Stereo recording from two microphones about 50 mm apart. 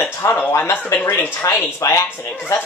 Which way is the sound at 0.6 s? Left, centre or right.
Left.